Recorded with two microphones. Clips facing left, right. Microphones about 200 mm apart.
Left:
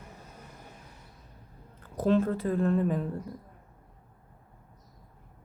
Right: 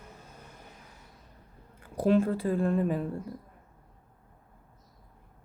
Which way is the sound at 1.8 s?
10° right (ahead or behind).